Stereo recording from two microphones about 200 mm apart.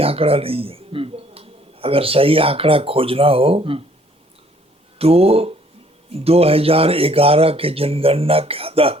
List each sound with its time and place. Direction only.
0.0 s speech: 30° right (ahead or behind)
4.9 s speech: 30° right (ahead or behind)